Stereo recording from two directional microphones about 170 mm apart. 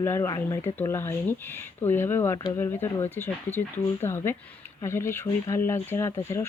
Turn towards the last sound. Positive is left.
turn(degrees=15)  # may be behind; listen again after turning